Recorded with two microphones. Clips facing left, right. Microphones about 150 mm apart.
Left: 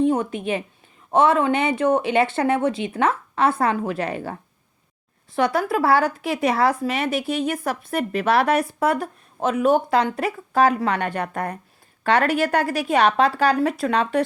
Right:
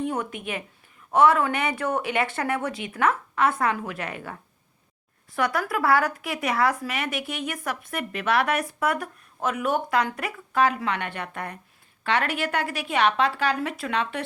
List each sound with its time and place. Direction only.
0.0 s a woman's voice: 30° left (ahead or behind)